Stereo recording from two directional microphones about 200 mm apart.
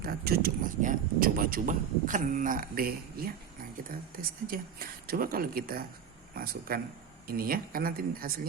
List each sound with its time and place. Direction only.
0.0 s speech: 50° right (ahead or behind)